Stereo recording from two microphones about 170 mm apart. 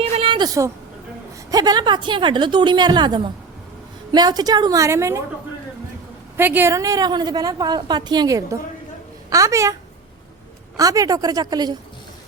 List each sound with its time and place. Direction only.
0.0 s a sound: 35° right (ahead or behind)
1.5 s a woman's voice: 25° right (ahead or behind)
6.3 s a woman's voice: 10° right (ahead or behind)
10.8 s a woman's voice: 20° right (ahead or behind)